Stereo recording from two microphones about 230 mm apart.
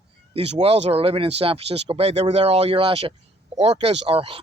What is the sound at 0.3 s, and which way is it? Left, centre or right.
Speech, right.